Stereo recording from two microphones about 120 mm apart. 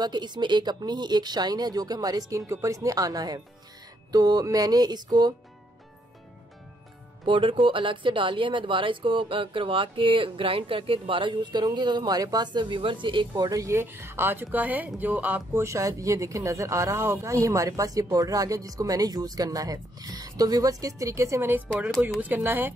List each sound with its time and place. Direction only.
0.0 s speech: 35° right (ahead or behind)
7.2 s speech: 45° right (ahead or behind)
13.4 s speech: 30° right (ahead or behind)